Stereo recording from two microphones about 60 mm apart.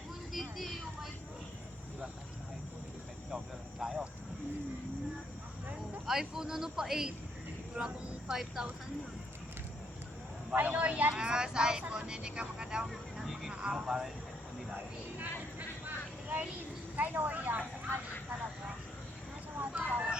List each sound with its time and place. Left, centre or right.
0.3 s speech: centre
3.3 s speech: centre
6.1 s speech: centre
10.5 s speech: right
11.1 s speech: centre
15.2 s vehicle: right
17.0 s speech: right
19.5 s speech: right